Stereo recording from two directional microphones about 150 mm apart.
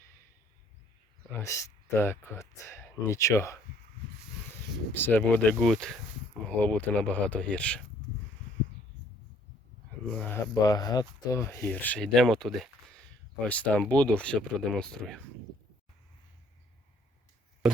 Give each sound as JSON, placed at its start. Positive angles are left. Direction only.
{"t": 1.3, "sound": "speech", "side_deg": 20}
{"t": 4.9, "sound": "speech", "side_deg": 15}
{"t": 10.1, "sound": "speech", "side_deg": 10}
{"t": 10.5, "sound": "speech", "side_deg": 25}
{"t": 11.5, "sound": "speech", "side_deg": 10}